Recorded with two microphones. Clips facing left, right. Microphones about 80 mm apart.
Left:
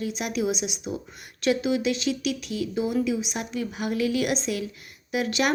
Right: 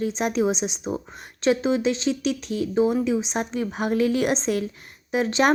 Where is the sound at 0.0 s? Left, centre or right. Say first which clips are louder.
Right 5 dB; right.